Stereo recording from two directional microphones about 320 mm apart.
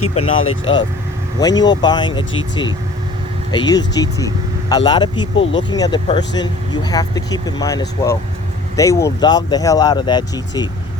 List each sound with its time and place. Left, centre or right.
0.1 s speech: centre
0.3 s speech: left
1.4 s speech: centre